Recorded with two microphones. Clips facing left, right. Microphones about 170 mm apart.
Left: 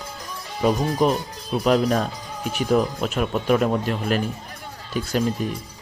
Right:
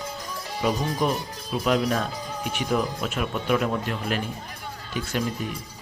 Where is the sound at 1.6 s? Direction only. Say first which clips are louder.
Left 4 dB; 40° left (ahead or behind).